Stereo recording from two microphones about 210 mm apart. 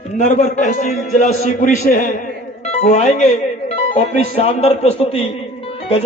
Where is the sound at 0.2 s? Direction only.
35° left (ahead or behind).